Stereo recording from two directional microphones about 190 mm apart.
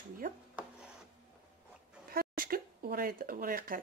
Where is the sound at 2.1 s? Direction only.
50° right (ahead or behind).